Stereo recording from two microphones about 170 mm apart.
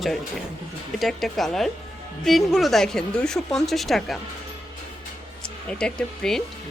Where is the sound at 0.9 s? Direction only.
Centre (ahead or behind).